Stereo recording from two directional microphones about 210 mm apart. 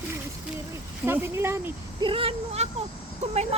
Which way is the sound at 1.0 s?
10° right (ahead or behind).